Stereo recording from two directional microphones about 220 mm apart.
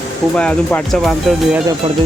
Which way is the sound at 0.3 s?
5° left (ahead or behind).